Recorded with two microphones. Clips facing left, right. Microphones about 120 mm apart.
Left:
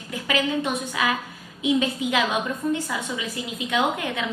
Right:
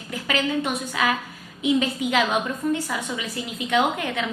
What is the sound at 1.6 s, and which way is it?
A woman's voice, 20° left (ahead or behind).